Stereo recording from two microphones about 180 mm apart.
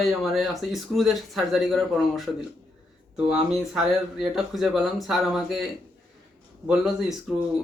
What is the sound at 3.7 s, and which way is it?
Speech, 5° right (ahead or behind).